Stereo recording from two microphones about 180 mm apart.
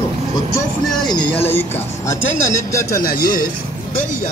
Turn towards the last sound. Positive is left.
turn(degrees=55)  # may be behind; listen again after turning